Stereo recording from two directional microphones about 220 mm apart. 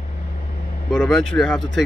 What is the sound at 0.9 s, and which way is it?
Speech, centre (ahead or behind).